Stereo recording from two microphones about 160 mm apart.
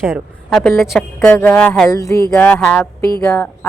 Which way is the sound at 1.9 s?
20° left (ahead or behind).